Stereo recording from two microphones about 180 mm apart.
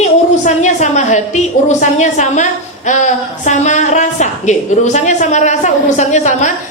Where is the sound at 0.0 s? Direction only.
40° left (ahead or behind).